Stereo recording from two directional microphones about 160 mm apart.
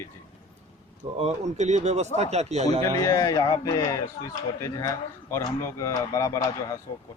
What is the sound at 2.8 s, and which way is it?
Speech, 20° left (ahead or behind).